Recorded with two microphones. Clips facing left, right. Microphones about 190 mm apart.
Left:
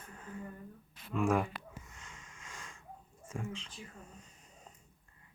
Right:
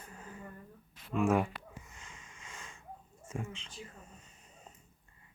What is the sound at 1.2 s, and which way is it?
Speech, 5° right (ahead or behind).